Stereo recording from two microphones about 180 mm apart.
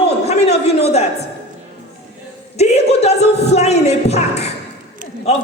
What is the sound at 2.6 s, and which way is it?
Speech, 35° left (ahead or behind).